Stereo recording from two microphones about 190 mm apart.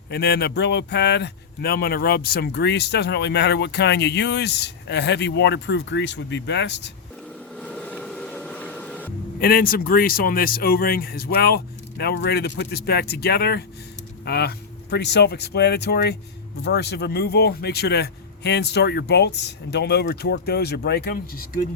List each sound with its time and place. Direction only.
0.1 s speech: 55° left (ahead or behind)
7.5 s music: 5° left (ahead or behind)
9.4 s speech: 50° left (ahead or behind)